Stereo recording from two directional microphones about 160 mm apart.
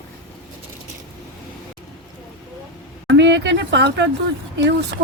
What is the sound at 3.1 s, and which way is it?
Speech, 90° right.